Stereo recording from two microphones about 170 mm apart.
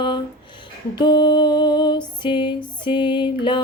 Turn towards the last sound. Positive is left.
turn(degrees=30)  # may be behind; listen again after turning